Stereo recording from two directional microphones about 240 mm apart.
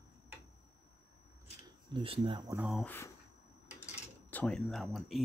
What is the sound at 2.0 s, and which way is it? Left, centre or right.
Speech, right.